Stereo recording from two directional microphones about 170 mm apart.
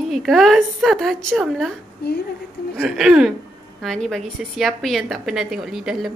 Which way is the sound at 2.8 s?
Centre (ahead or behind).